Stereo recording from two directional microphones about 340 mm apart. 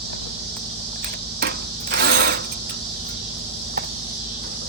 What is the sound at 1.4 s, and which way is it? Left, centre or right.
Mechanisms, right.